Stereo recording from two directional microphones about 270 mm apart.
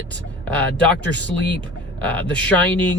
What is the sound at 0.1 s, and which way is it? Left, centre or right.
Speech, centre.